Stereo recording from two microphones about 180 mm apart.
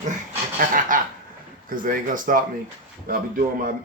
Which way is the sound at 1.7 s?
50° right (ahead or behind).